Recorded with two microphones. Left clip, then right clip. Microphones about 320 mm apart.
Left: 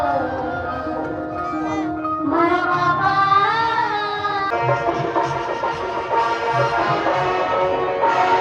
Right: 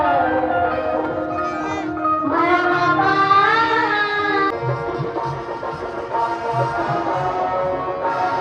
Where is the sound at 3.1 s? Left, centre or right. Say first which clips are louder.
Right 1 dB; left.